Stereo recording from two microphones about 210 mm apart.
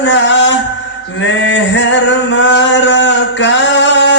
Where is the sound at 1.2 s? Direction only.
60° left (ahead or behind).